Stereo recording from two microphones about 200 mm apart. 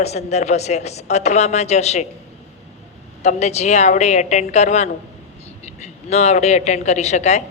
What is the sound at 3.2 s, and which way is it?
A woman's voice, 35° left (ahead or behind).